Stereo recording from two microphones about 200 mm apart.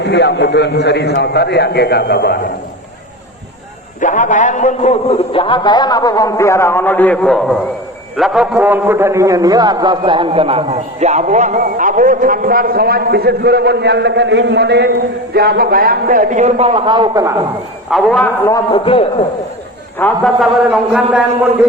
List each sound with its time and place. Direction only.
0.0 s a man's voice: 60° left (ahead or behind)
4.0 s a man's voice: 40° left (ahead or behind); by 17.3 s 20° right (ahead or behind)
17.9 s a man's voice: 5° left (ahead or behind)
20.0 s a man's voice: 10° left (ahead or behind)